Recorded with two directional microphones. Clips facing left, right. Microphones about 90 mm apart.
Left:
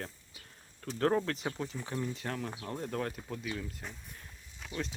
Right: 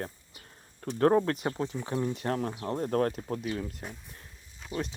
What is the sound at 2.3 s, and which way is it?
Speech, 40° right (ahead or behind).